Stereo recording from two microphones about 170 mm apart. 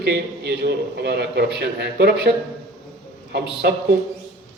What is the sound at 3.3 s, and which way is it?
Speech, 70° right (ahead or behind).